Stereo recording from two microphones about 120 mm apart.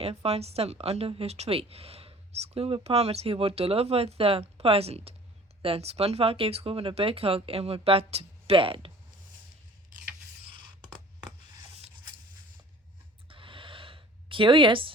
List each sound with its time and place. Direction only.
0.0 s a woman's voice: 55° right (ahead or behind)
10.6 s scissors: 35° right (ahead or behind)
13.2 s gasp: 45° right (ahead or behind)